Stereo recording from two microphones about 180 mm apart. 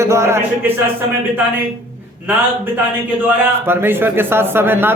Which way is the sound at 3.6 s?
10° right (ahead or behind).